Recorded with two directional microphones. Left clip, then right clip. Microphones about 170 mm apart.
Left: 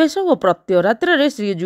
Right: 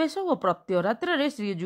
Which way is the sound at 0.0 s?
40° left (ahead or behind).